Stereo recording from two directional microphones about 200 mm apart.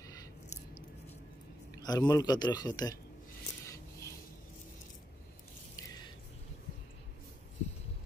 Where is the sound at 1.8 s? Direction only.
20° left (ahead or behind).